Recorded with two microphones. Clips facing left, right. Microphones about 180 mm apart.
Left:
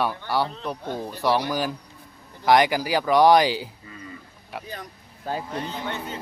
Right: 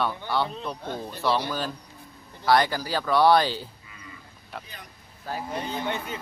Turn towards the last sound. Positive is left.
turn(degrees=-15)  # may be behind; listen again after turning